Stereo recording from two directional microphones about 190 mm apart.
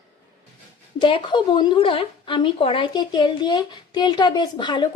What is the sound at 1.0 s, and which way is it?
A woman's voice, 25° left (ahead or behind).